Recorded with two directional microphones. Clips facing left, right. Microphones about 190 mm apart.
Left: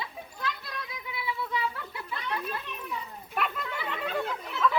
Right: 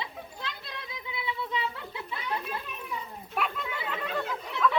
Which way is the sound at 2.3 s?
25° right (ahead or behind).